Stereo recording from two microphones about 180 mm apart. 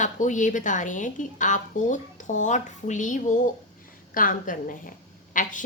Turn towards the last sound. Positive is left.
turn(degrees=45)  # may be behind; listen again after turning